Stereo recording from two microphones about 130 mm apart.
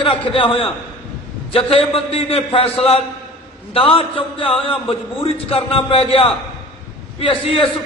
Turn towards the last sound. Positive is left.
turn(degrees=45)  # may be behind; listen again after turning